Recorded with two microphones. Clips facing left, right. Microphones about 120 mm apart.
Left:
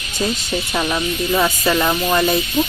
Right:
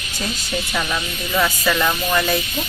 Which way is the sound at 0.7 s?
25° left (ahead or behind).